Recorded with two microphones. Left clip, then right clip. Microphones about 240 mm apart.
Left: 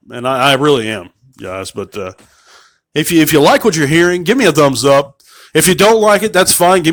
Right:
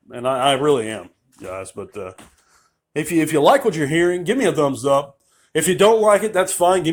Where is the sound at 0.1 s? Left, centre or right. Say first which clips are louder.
Left 6 dB; left.